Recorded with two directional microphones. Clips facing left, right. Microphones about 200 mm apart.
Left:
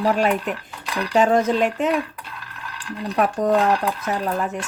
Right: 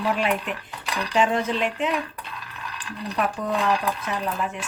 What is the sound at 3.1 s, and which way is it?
Speech, 45° left (ahead or behind).